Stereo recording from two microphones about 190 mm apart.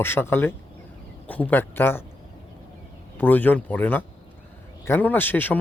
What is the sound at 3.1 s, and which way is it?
Speech, 10° left (ahead or behind).